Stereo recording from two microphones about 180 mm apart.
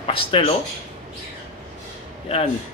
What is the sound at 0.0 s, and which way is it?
Speech, 30° left (ahead or behind).